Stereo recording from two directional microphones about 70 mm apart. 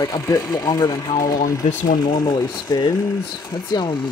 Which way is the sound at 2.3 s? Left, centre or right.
Left.